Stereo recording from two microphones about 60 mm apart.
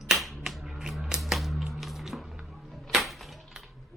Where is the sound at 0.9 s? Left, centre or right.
Centre.